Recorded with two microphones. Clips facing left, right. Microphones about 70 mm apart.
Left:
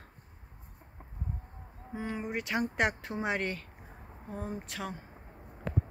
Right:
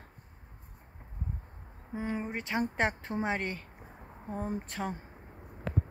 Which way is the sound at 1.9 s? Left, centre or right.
Centre.